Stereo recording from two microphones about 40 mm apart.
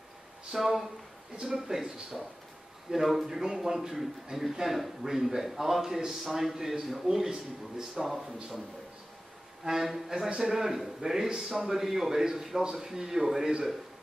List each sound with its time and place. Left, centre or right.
0.5 s a man's voice: centre
9.7 s a man's voice: centre
10.1 s a man's voice: centre